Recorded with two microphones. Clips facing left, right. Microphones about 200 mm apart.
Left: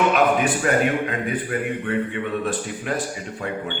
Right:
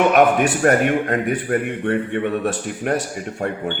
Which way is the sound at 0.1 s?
55° right (ahead or behind).